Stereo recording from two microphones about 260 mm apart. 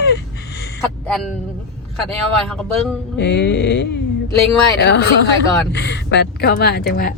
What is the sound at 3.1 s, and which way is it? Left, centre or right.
A woman's voice, left.